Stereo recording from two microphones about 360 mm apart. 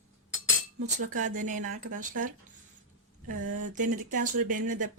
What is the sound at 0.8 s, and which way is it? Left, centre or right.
Speech, centre.